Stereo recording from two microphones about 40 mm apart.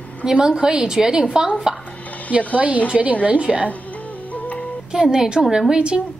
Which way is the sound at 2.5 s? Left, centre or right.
Right.